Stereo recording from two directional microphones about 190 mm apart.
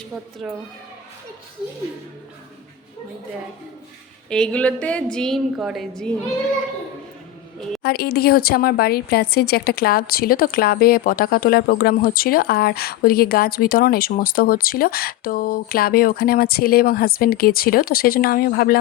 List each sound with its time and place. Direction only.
0.4 s a woman's voice: centre (ahead or behind)
4.3 s a woman's voice: 5° left (ahead or behind)
7.8 s speech: 55° left (ahead or behind)